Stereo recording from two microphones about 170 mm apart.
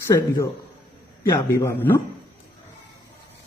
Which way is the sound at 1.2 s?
15° left (ahead or behind).